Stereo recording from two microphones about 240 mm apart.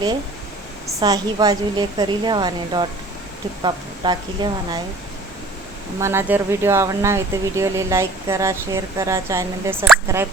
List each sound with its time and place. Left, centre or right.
0.9 s a woman's voice: centre
6.0 s speech: centre